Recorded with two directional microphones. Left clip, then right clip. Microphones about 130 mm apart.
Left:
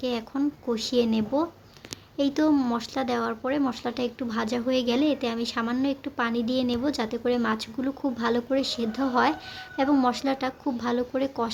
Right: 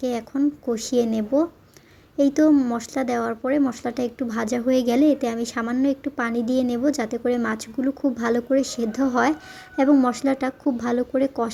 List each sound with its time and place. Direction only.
0.0 s speech: 30° right (ahead or behind)